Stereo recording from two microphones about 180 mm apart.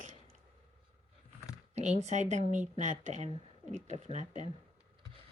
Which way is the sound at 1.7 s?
40° right (ahead or behind).